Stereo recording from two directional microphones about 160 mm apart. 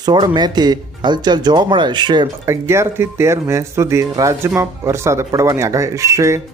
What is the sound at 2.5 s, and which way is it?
Speech, 15° right (ahead or behind).